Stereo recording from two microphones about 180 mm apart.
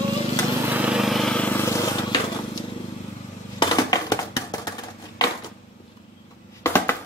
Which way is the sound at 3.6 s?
25° left (ahead or behind).